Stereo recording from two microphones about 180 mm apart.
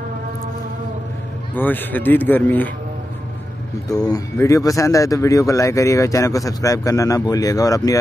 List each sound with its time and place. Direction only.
1.5 s speech: 10° left (ahead or behind)
3.9 s speech: 20° left (ahead or behind)